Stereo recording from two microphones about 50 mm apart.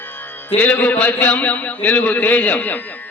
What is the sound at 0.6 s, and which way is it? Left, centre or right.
A man's voice, left.